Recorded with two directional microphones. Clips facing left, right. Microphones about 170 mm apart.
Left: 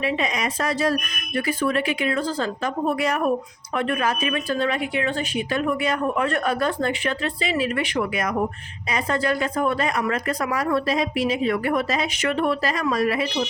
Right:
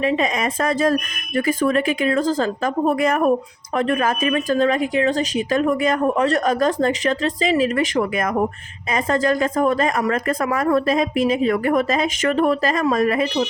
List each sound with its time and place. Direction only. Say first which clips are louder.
0.0 s speech: right 4 dB; 45° right (ahead or behind)